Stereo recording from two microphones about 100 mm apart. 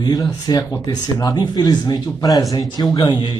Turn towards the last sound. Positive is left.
turn(degrees=45)  # may be behind; listen again after turning